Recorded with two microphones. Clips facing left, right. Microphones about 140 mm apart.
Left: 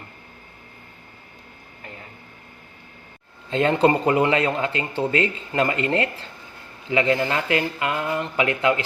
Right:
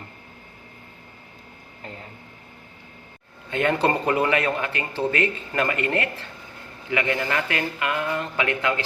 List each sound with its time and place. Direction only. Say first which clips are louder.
3.5 s speech: left 3 dB; 25° left (ahead or behind)